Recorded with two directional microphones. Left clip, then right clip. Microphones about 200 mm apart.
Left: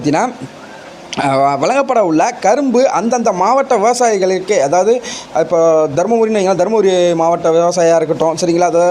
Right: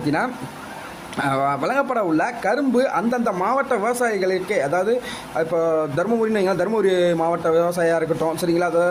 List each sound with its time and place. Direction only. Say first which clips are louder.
1.1 s speech: left 8 dB; 30° left (ahead or behind)